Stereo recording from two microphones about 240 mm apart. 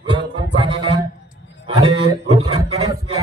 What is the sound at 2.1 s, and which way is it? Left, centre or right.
Speech, right.